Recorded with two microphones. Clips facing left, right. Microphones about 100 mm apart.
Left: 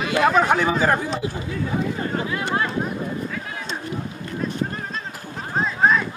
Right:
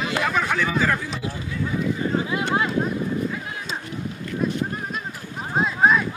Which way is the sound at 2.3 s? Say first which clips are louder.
Right 1 dB; 15° right (ahead or behind).